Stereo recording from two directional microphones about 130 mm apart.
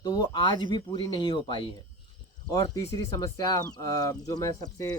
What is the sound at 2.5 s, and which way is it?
Speech, 25° left (ahead or behind).